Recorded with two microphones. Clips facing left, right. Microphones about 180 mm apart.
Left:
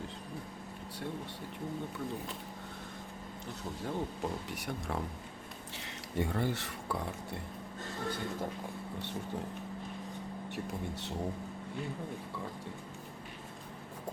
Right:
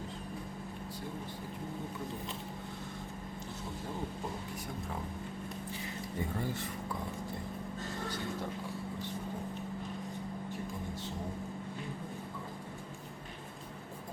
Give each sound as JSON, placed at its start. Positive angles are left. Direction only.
{"t": 4.5, "sound": "speech", "side_deg": 80}
{"t": 6.1, "sound": "speech", "side_deg": 75}
{"t": 10.5, "sound": "speech", "side_deg": 70}